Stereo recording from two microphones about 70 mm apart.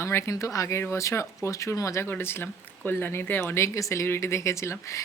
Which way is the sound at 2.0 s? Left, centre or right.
Left.